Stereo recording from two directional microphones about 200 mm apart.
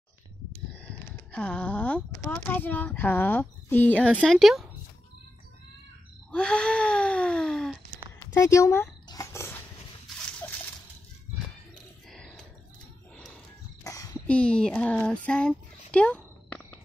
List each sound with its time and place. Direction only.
0.7 s speech: 5° left (ahead or behind)
3.9 s a woman's voice: 5° right (ahead or behind)
6.3 s gasp: 5° left (ahead or behind)
8.2 s a sound: 15° left (ahead or behind)
13.8 s a sound: 15° left (ahead or behind)
14.2 s speech: 5° left (ahead or behind)